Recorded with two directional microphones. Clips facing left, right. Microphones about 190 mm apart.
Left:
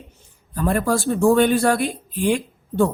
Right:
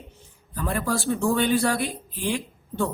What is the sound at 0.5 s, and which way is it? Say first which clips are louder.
Speech: left 6 dB; 50° left (ahead or behind).